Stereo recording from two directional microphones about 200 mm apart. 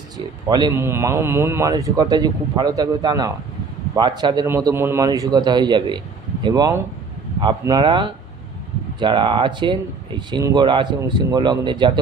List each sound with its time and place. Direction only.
0.5 s speech: 20° right (ahead or behind)